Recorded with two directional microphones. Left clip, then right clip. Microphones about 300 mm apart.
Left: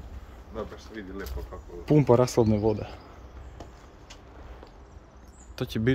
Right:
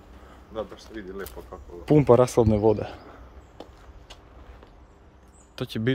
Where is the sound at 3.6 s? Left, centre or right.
Centre.